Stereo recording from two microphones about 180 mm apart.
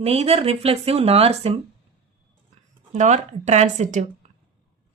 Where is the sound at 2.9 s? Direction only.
40° right (ahead or behind).